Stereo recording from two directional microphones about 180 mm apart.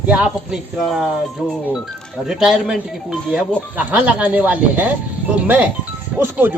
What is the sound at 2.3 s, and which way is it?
Speech, centre (ahead or behind).